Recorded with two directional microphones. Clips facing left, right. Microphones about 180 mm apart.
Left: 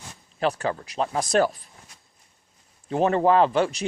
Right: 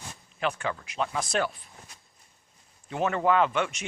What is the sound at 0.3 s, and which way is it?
Speech, 35° left (ahead or behind).